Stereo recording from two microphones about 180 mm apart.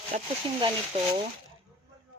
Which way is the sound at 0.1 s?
45° right (ahead or behind).